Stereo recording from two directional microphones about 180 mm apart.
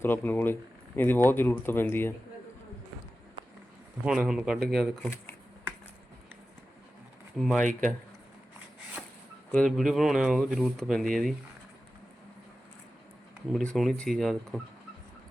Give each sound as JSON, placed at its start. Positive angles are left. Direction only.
{"t": 0.0, "sound": "speech", "side_deg": 10}
{"t": 4.0, "sound": "speech", "side_deg": -5}
{"t": 7.3, "sound": "speech", "side_deg": 0}
{"t": 7.6, "sound": "speech", "side_deg": -45}
{"t": 9.5, "sound": "speech", "side_deg": 0}
{"t": 13.7, "sound": "speech", "side_deg": 5}